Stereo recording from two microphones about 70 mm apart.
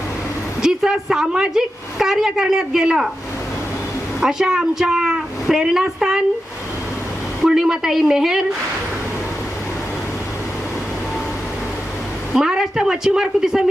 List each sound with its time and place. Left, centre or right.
0.6 s a woman's voice: centre
4.2 s a woman's voice: centre
7.4 s a woman's voice: centre
12.3 s a woman's voice: centre